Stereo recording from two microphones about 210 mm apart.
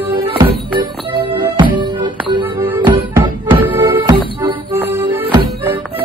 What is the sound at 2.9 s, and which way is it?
Music, 20° right (ahead or behind).